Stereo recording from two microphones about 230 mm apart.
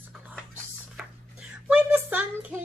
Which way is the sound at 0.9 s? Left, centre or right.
Centre.